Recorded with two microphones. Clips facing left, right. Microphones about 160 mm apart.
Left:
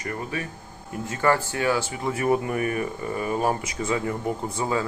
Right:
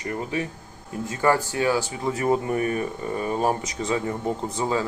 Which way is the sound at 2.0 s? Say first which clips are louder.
Even; 25° right (ahead or behind).